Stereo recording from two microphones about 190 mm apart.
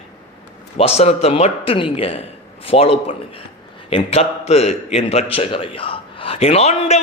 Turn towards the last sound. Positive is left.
turn(degrees=35)  # may be behind; listen again after turning